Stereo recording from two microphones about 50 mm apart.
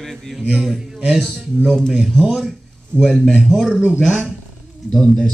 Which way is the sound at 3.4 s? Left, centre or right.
Centre.